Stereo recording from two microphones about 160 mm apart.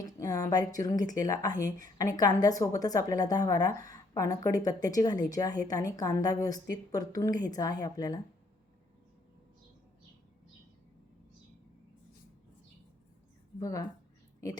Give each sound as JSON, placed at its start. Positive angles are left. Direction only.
{"t": 0.0, "sound": "a woman's voice", "side_deg": 20}
{"t": 13.6, "sound": "a woman's voice", "side_deg": 20}